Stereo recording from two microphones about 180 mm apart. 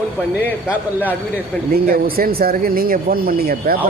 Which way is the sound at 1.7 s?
55° right (ahead or behind).